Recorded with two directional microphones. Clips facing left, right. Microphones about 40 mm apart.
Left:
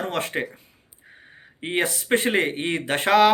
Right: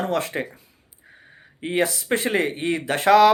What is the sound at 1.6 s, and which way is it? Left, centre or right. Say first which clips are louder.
Speech: right 2 dB; left.